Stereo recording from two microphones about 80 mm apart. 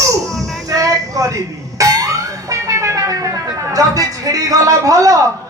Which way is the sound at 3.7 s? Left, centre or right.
Right.